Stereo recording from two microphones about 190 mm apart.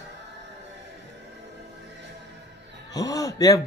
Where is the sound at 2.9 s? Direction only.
20° left (ahead or behind).